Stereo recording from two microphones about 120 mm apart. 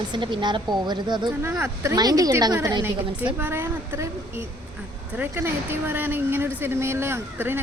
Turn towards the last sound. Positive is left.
turn(degrees=-20)  # may be behind; listen again after turning